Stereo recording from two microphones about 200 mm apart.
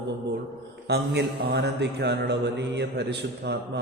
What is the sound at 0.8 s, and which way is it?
Mantra, 55° right (ahead or behind).